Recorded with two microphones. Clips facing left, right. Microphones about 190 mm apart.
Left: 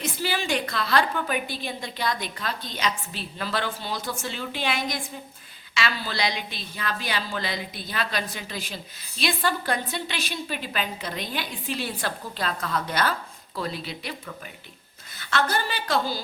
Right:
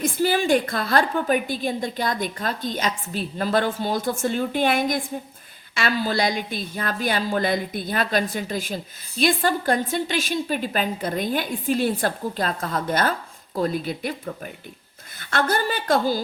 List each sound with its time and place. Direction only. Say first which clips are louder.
0.0 s a woman's voice: right 7 dB; 50° right (ahead or behind)